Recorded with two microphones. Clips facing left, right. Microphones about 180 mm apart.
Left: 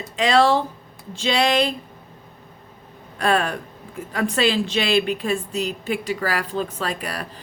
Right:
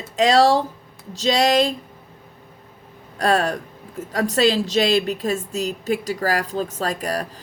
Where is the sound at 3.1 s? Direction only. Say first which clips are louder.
Right 1 dB; 40° right (ahead or behind).